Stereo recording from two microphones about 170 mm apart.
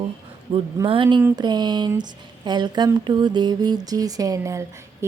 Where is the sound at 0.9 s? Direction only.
30° right (ahead or behind).